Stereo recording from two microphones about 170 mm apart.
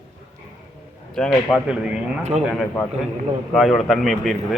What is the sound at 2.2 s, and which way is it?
Speech, 40° right (ahead or behind).